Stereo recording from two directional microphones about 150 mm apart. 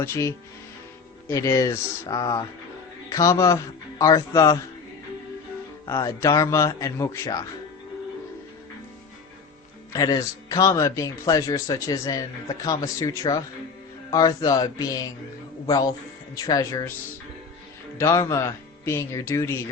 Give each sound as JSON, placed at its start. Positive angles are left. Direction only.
{"t": 0.0, "sound": "a man's voice", "side_deg": 20}
{"t": 5.9, "sound": "a man's voice", "side_deg": 20}
{"t": 9.9, "sound": "a man's voice", "side_deg": 25}
{"t": 17.9, "sound": "a man's voice", "side_deg": 20}